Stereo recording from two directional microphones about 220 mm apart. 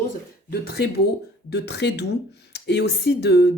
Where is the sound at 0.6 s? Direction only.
45° left (ahead or behind).